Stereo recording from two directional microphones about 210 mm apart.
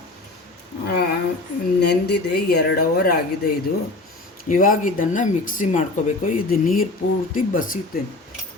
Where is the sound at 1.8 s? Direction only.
50° left (ahead or behind).